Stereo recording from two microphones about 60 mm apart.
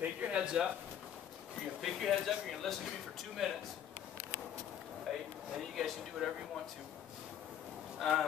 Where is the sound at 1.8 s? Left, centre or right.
Centre.